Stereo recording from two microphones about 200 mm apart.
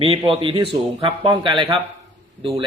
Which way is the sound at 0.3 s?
25° right (ahead or behind).